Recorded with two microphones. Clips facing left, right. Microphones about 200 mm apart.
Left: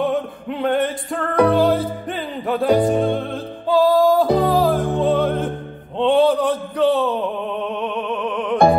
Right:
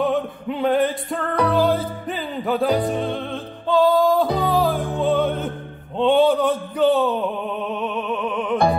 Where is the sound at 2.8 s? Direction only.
50° left (ahead or behind).